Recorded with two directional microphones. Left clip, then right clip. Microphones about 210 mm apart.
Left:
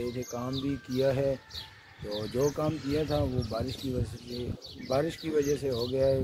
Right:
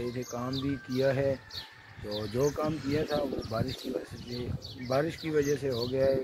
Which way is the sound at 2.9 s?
15° left (ahead or behind).